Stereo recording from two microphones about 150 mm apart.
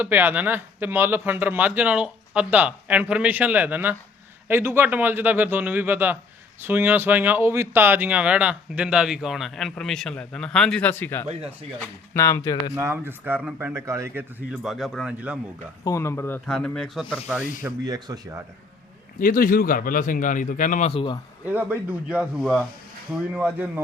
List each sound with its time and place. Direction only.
0.0 s speech: 15° right (ahead or behind); by 11.3 s 15° left (ahead or behind)
11.3 s speech: 40° right (ahead or behind)
12.1 s speech: 20° left (ahead or behind)
12.7 s speech: 15° right (ahead or behind)
14.6 s speech: centre (ahead or behind)
15.8 s speech: 20° left (ahead or behind)
16.5 s speech: 5° left (ahead or behind)
17.8 s speech: 25° right (ahead or behind)
19.2 s a man's voice: 70° left (ahead or behind)
20.9 s a man's voice: 35° left (ahead or behind)
21.4 s speech: 10° right (ahead or behind)